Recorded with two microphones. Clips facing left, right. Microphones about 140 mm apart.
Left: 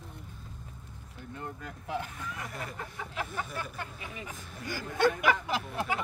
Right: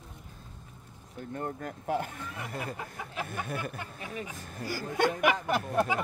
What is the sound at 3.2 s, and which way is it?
Speech, 55° right (ahead or behind).